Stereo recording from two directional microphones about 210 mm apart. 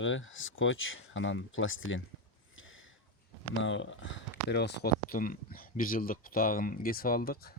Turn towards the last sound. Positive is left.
turn(degrees=45)  # may be behind; listen again after turning